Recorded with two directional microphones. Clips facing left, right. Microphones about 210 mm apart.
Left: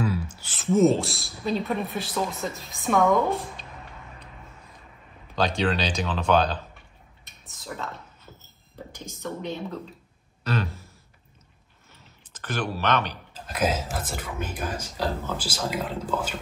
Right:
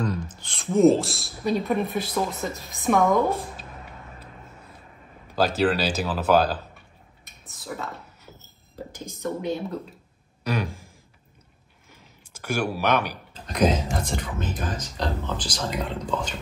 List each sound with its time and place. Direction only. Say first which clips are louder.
0.0 s speech: left 1 dB; 5° left (ahead or behind)
5.3 s speech: right 3 dB; 5° right (ahead or behind)
9.0 s speech: right 4 dB; 15° right (ahead or behind)
10.4 s a sound: right 1 dB; 15° right (ahead or behind)
11.9 s a sound: right 2 dB; 10° right (ahead or behind)
13.3 s speech: right 5 dB; 5° left (ahead or behind)